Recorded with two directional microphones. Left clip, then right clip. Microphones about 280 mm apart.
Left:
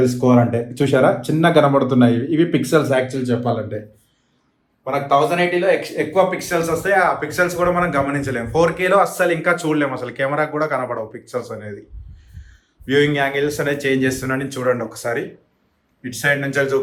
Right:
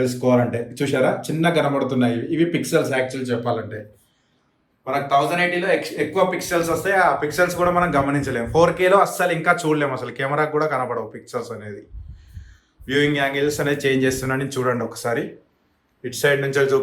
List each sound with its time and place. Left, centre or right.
0.5 s a man's voice: centre
3.4 s speech: centre
4.8 s a man's voice: centre
12.8 s speech: centre